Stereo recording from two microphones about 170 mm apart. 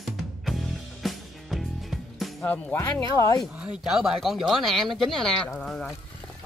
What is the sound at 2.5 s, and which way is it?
Speech, 15° left (ahead or behind).